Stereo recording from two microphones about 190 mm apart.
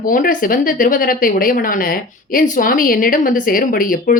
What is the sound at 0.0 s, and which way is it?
Speech, 45° left (ahead or behind).